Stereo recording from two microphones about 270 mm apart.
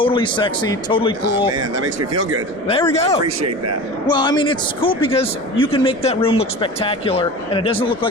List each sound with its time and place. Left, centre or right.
0.0 s a man's voice: centre
1.7 s speech: right
2.6 s a man's voice: left